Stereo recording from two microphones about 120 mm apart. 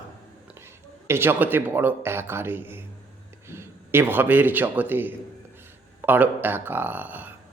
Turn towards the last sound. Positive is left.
turn(degrees=-15)  # may be behind; listen again after turning